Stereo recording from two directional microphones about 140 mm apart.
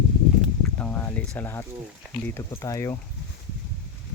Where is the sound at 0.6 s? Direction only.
10° left (ahead or behind).